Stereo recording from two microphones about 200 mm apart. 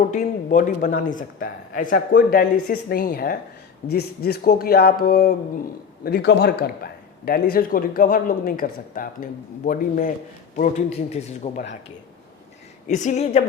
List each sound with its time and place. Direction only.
0.1 s a man's voice: 40° left (ahead or behind)
12.9 s a man's voice: 35° left (ahead or behind)